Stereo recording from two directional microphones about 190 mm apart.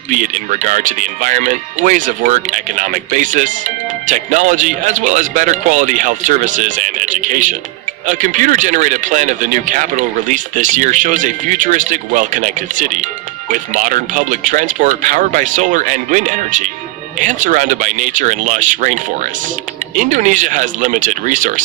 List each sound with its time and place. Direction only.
0.1 s speech: 40° right (ahead or behind)
20.0 s speech: 40° right (ahead or behind)